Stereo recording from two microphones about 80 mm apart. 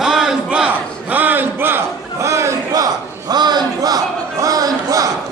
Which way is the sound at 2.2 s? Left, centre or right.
Right.